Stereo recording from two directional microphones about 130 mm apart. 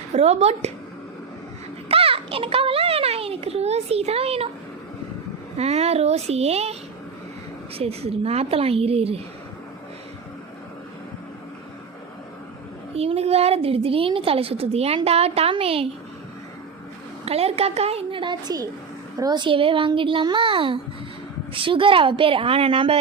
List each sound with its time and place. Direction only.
0.1 s speech: 55° right (ahead or behind)
1.9 s a woman's voice: 45° right (ahead or behind)
5.5 s a woman's voice: 55° right (ahead or behind)
7.8 s a woman's voice: 50° right (ahead or behind)
12.9 s a woman's voice: 50° right (ahead or behind)
17.2 s a woman's voice: 50° right (ahead or behind)